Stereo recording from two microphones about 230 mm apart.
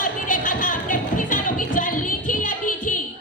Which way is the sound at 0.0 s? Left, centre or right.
Left.